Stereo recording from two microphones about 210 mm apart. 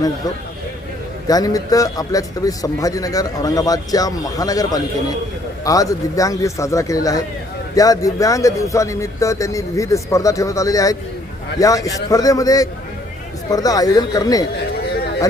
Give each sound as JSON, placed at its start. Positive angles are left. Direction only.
{"t": 1.3, "sound": "speech", "side_deg": 15}